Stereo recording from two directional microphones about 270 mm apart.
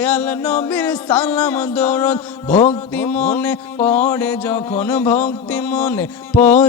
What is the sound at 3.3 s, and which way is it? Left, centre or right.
Music, centre.